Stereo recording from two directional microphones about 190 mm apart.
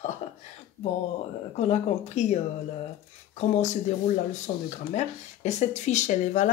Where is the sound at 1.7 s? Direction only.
35° left (ahead or behind).